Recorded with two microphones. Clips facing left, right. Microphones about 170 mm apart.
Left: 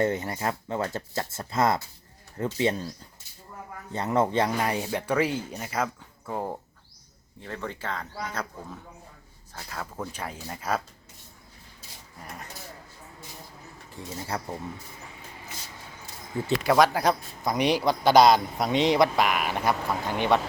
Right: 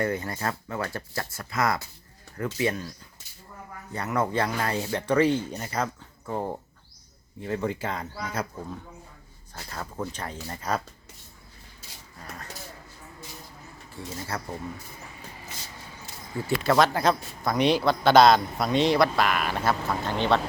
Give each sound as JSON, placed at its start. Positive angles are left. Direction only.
{"t": 0.0, "sound": "speech", "side_deg": 20}
{"t": 3.9, "sound": "a man's voice", "side_deg": 25}
{"t": 7.4, "sound": "speech", "side_deg": -10}
{"t": 13.9, "sound": "a man's voice", "side_deg": 15}
{"t": 16.6, "sound": "a man's voice", "side_deg": 10}